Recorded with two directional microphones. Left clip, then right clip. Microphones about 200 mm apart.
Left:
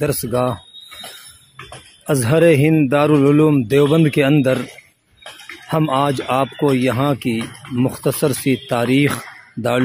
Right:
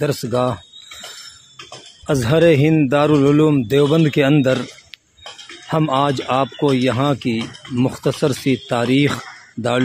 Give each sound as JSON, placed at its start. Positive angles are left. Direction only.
{"t": 0.0, "sound": "a man's voice", "side_deg": 0}
{"t": 2.0, "sound": "a man's voice", "side_deg": 5}
{"t": 5.7, "sound": "a man's voice", "side_deg": 0}